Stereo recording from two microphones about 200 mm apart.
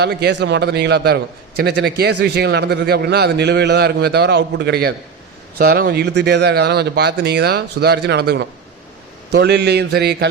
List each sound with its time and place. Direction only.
0.0 s a man's voice: 55° right (ahead or behind)